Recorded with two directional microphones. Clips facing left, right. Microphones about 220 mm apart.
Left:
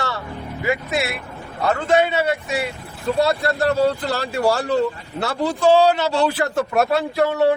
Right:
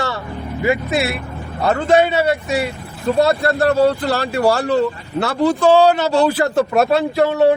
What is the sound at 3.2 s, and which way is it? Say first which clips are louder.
Speech: right 4 dB; 55° right (ahead or behind).